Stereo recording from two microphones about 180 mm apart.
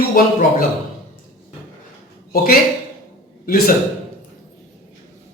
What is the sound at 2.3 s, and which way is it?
Speech, 55° left (ahead or behind).